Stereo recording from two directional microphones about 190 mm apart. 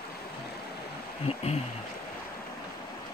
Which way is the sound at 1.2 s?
35° left (ahead or behind).